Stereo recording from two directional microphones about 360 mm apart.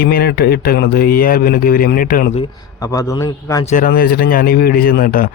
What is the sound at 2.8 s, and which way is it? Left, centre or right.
Speech, centre.